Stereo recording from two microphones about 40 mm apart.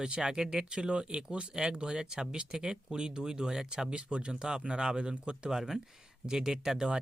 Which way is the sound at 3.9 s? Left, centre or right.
Right.